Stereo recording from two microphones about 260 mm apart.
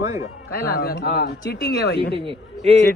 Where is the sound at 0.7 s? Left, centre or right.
Left.